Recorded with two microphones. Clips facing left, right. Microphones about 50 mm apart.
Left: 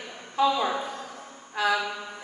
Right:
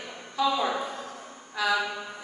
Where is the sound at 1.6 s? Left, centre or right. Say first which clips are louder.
Left 2 dB; left.